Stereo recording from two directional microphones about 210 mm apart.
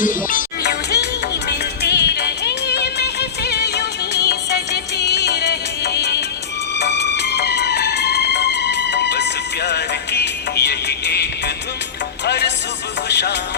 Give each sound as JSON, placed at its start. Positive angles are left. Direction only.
{"t": 0.0, "sound": "music", "side_deg": 40}